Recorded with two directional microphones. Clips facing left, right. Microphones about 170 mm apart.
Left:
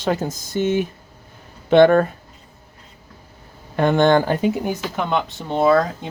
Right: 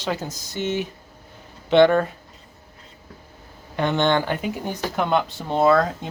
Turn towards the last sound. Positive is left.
turn(degrees=-5)  # may be behind; listen again after turning